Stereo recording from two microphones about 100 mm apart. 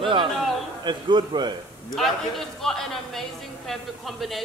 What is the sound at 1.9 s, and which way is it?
A man's voice, centre (ahead or behind).